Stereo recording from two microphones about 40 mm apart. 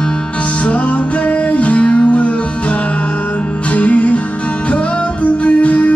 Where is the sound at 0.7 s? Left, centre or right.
Left.